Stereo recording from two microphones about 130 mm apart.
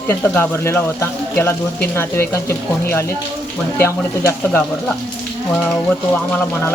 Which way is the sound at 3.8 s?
15° left (ahead or behind).